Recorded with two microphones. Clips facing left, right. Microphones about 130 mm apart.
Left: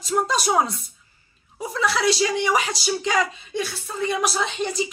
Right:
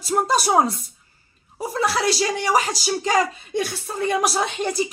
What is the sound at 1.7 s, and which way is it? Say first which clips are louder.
Speech: even; 45° right (ahead or behind).